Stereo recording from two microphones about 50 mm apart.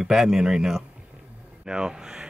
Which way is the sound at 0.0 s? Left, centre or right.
Centre.